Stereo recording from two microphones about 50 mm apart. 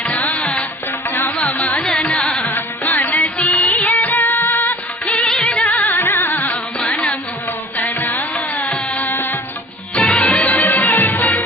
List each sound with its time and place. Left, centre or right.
0.0 s music: left
1.4 s carnatic music: left
2.0 s carnatic music: left
2.5 s music: left
5.0 s music: left
5.6 s music: left
6.7 s music: left
7.8 s music: left
10.0 s music: centre; by 11.4 s left